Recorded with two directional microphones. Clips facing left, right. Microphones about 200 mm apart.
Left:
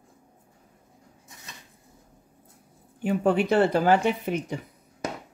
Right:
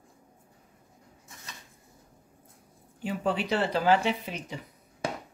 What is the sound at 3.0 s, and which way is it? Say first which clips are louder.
Speech: left 7 dB; 55° left (ahead or behind).